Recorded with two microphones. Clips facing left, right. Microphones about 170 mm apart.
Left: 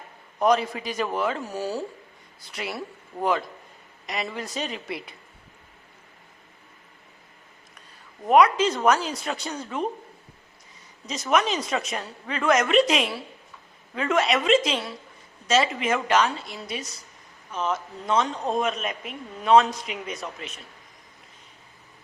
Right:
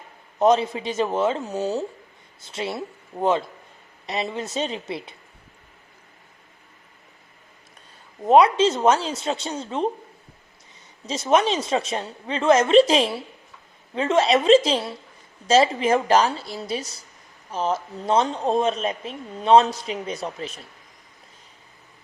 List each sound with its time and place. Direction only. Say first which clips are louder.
0.3 s a woman's voice: right 3 dB; 25° right (ahead or behind)
8.2 s a woman's voice: right 3 dB; 25° right (ahead or behind)
11.0 s a woman's voice: right 4 dB; 30° right (ahead or behind)